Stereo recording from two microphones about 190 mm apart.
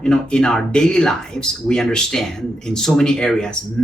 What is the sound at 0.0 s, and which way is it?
Speech, 5° left (ahead or behind).